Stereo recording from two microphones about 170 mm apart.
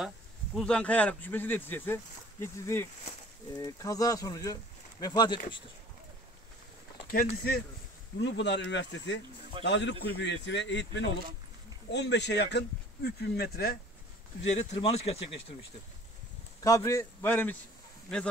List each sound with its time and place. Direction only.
0.6 s speech: 5° left (ahead or behind); by 5.6 s 25° left (ahead or behind)
7.1 s speech: 60° left (ahead or behind)
8.2 s a man's voice: 90° left; by 13.7 s 65° left (ahead or behind)
14.4 s speech: 40° left (ahead or behind)
16.6 s speech: 20° left (ahead or behind)